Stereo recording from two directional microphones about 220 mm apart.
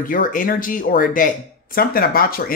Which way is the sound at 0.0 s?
40° left (ahead or behind).